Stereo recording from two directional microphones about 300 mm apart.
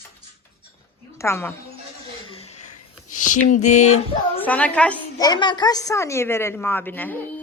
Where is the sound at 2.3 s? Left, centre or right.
Centre.